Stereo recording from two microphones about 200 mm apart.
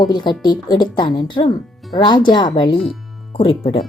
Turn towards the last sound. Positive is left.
turn(degrees=25)  # may be behind; listen again after turning